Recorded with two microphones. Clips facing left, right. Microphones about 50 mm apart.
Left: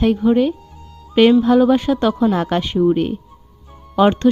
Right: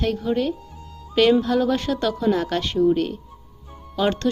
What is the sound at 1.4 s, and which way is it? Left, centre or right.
Speech, centre.